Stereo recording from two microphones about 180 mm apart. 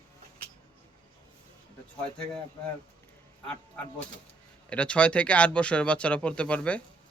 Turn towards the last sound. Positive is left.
turn(degrees=5)  # may be behind; listen again after turning